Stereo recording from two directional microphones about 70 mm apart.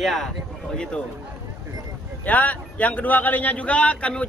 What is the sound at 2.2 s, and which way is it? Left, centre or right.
A man's voice, left.